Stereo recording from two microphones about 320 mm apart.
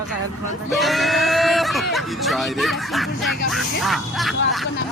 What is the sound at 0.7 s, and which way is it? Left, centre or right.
Speech, centre.